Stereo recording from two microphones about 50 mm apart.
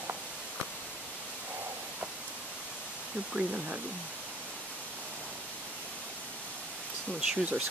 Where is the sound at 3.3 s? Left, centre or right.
Right.